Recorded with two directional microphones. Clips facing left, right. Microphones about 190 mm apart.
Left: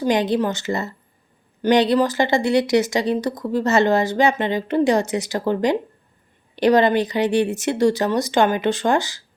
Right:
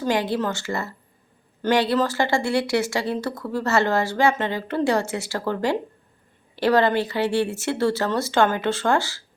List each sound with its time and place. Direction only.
0.0 s speech: 20° left (ahead or behind)